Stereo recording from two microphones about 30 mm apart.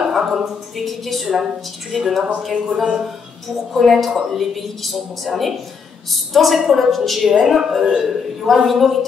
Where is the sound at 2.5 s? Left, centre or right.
Right.